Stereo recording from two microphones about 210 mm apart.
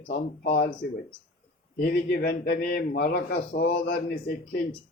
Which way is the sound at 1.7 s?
50° left (ahead or behind).